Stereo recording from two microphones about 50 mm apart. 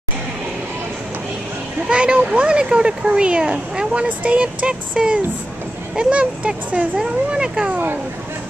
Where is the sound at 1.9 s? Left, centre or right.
Right.